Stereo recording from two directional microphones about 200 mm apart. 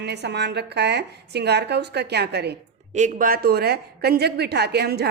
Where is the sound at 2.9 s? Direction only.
40° right (ahead or behind).